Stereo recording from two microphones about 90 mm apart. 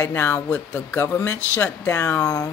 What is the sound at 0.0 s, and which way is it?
Speech, 25° left (ahead or behind).